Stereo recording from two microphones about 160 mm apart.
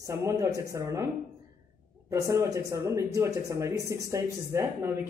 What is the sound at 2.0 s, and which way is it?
Speech, 20° right (ahead or behind).